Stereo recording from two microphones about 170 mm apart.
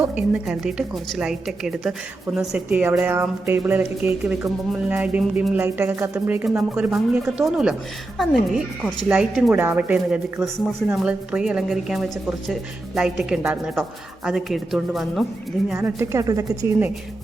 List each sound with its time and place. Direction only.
0.0 s a woman's voice: 10° right (ahead or behind)
15.8 s speech: 15° right (ahead or behind)